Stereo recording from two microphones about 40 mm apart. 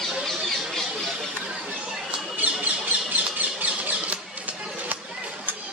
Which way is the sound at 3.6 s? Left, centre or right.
Right.